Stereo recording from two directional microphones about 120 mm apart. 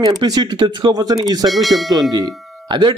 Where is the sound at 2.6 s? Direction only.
40° right (ahead or behind).